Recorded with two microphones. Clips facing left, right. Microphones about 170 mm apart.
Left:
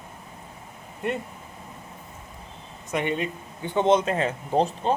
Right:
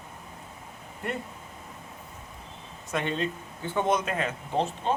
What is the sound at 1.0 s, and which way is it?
Speech, 20° left (ahead or behind).